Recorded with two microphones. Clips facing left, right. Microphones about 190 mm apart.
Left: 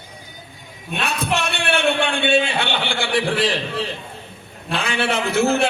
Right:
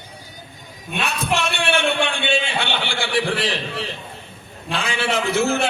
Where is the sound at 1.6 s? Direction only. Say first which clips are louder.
Left 3 dB; 60° left (ahead or behind).